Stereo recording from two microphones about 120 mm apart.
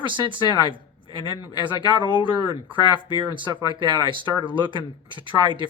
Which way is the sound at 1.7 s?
40° left (ahead or behind).